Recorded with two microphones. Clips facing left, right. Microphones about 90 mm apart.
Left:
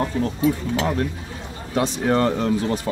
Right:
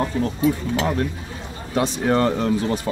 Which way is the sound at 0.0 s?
30° right (ahead or behind).